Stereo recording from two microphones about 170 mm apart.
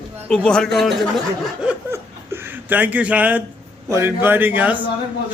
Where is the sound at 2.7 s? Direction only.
10° right (ahead or behind).